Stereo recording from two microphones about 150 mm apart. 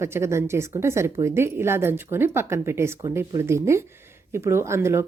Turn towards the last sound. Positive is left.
turn(degrees=-15)  # may be behind; listen again after turning